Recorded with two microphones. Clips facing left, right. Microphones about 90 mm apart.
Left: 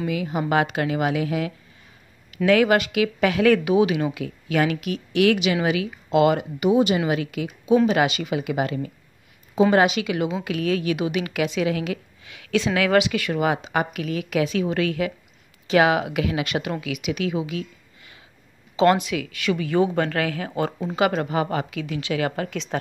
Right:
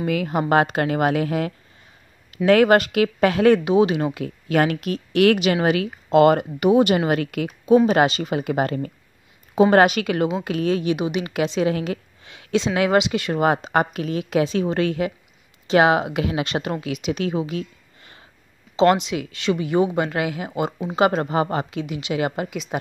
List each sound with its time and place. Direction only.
0.0 s a woman's voice: 55° right (ahead or behind)
0.4 s a woman's voice: 40° right (ahead or behind)
3.5 s speech: 30° right (ahead or behind); by 7.7 s 55° right (ahead or behind)
7.9 s speech: 40° right (ahead or behind)
10.4 s a woman's voice: 35° right (ahead or behind)
13.4 s a woman's voice: 40° right (ahead or behind)
18.8 s a woman's voice: 25° right (ahead or behind)
20.9 s a woman's voice: 30° right (ahead or behind)
21.8 s a woman's voice: 20° right (ahead or behind)
22.5 s speech: 10° right (ahead or behind)